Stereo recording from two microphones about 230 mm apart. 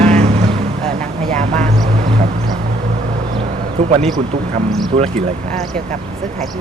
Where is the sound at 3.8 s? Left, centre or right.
Right.